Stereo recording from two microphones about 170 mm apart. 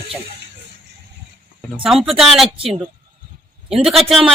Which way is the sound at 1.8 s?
Centre (ahead or behind).